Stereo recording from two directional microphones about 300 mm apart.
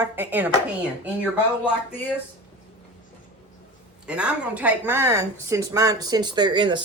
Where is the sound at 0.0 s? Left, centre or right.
Centre.